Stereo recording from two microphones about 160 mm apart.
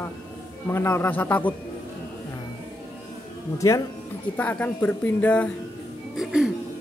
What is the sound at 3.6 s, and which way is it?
Speech, 20° left (ahead or behind).